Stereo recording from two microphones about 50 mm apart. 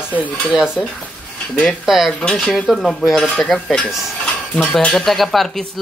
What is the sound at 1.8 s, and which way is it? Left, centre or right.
Stir, centre.